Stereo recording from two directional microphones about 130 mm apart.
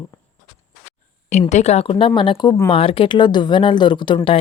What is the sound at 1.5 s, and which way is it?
Speech, 60° left (ahead or behind).